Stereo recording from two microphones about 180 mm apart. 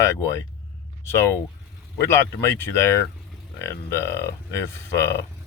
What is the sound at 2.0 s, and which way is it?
Speech, 15° left (ahead or behind).